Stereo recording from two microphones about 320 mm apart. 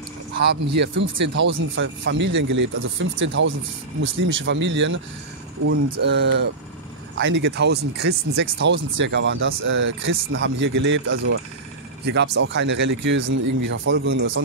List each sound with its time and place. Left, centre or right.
0.3 s a sound: right
0.7 s speech: right
6.0 s speech: right
13.3 s speech: right
13.7 s speech: right